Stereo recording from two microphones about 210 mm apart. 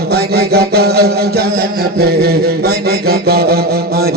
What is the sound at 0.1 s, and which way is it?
Mantra, 50° right (ahead or behind).